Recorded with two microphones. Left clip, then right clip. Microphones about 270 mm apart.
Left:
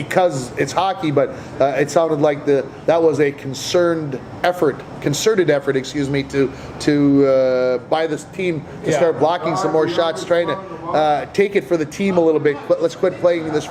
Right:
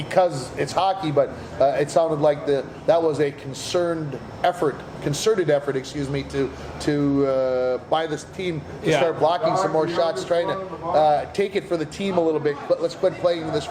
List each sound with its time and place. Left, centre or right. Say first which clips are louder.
0.1 s a man's voice: left 3 dB; left
9.8 s speech: left 4 dB; centre
10.2 s a man's voice: left 4 dB; left